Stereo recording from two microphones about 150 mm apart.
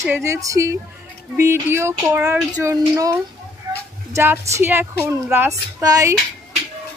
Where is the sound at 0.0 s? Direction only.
20° right (ahead or behind).